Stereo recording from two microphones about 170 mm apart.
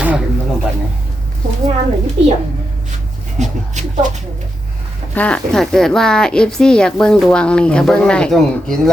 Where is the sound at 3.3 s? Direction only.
45° right (ahead or behind).